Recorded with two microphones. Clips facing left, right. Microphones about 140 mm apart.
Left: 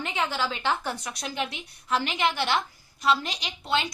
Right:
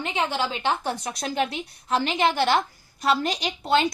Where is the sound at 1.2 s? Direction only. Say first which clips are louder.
Right 7 dB; 40° right (ahead or behind).